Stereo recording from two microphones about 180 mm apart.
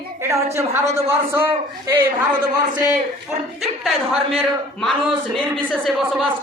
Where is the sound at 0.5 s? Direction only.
15° right (ahead or behind).